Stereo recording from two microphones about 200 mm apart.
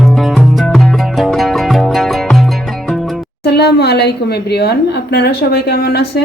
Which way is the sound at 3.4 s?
55° left (ahead or behind).